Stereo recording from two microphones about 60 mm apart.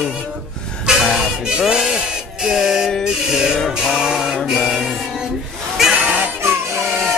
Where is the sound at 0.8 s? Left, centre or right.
Centre.